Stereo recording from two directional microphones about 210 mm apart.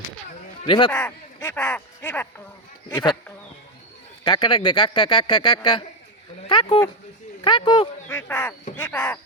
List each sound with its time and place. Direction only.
0.6 s a man's voice: 25° left (ahead or behind)
0.9 s speech: 10° left (ahead or behind)
2.9 s a man's voice: 20° left (ahead or behind)
4.2 s a man's voice: 20° left (ahead or behind)
8.1 s speech: 10° left (ahead or behind)